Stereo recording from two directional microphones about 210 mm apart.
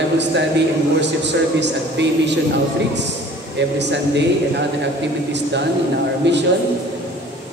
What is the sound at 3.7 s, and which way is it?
Speech, 55° right (ahead or behind).